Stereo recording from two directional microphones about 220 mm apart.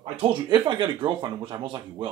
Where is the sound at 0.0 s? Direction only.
25° right (ahead or behind).